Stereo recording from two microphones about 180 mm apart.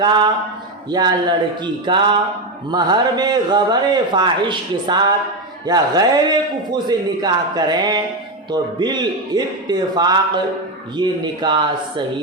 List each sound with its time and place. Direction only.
0.0 s a man's voice: 25° right (ahead or behind)